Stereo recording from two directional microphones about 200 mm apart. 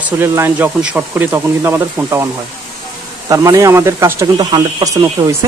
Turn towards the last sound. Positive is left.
turn(degrees=-15)  # may be behind; listen again after turning